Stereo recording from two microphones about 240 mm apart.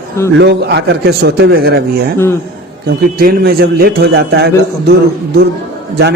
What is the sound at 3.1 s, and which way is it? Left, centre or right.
A man's voice, right.